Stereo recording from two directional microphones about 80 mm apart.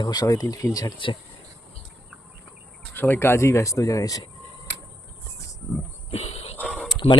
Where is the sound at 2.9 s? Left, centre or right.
Left.